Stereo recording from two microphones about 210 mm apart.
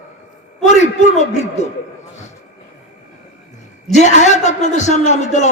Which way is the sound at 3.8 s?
35° left (ahead or behind).